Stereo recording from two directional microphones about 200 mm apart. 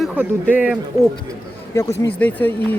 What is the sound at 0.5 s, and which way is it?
Speech, 5° right (ahead or behind).